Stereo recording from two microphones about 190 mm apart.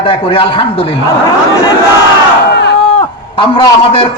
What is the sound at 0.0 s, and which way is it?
Speech, 30° left (ahead or behind).